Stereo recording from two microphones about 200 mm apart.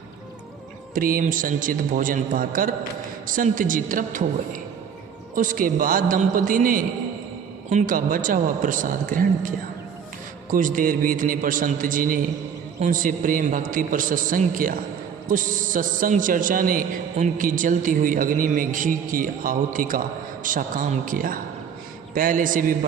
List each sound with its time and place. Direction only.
0.9 s a man's voice: 45° right (ahead or behind)
10.5 s a man's voice: 40° right (ahead or behind)